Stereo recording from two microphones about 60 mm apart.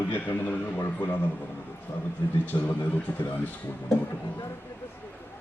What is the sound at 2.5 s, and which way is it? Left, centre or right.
Speech, left.